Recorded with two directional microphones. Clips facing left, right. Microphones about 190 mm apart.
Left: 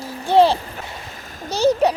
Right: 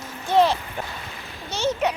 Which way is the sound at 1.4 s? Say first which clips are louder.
Left 7 dB; 35° left (ahead or behind).